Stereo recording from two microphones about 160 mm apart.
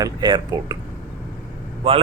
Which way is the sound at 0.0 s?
25° right (ahead or behind).